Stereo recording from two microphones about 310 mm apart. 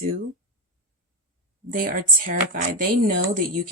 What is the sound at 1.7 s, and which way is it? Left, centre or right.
Speech, right.